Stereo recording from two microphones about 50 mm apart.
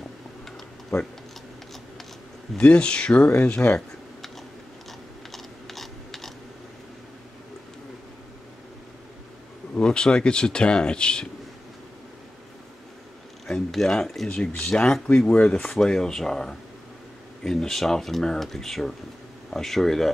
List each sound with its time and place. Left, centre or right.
2.5 s speech: left
3.6 s speech: left
5.3 s a sound: centre
9.8 s speech: centre
13.5 s speech: centre